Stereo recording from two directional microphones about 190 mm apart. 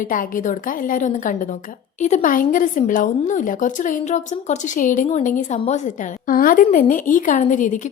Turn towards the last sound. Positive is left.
turn(degrees=40)  # may be behind; listen again after turning